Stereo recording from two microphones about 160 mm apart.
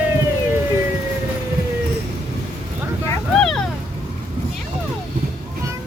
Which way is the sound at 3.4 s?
5° left (ahead or behind).